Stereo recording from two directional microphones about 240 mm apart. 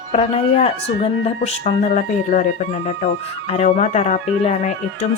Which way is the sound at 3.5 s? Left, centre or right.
Left.